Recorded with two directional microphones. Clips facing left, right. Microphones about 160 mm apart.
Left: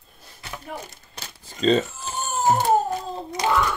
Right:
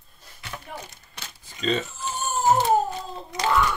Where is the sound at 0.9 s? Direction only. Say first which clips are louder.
Left 2 dB; 35° left (ahead or behind).